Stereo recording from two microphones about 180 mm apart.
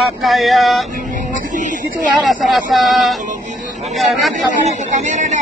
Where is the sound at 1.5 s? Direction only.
45° right (ahead or behind).